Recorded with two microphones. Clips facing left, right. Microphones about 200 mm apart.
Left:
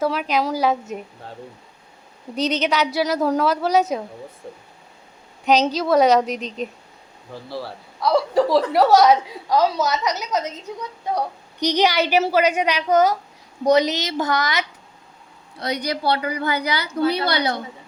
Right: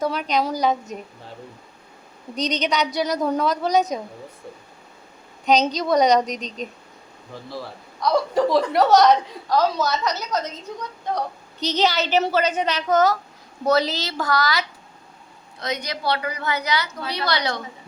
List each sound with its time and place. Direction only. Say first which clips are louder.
0.0 s a woman's voice: left 1 dB; 5° left (ahead or behind)
2.3 s a woman's voice: left 2 dB; 5° left (ahead or behind)
5.5 s a woman's voice: left 1 dB; 5° left (ahead or behind)
7.9 s a woman's voice: left 2 dB; 5° left (ahead or behind); by 14.6 s 20° left (ahead or behind)
15.5 s a woman's voice: left 4 dB; 30° left (ahead or behind)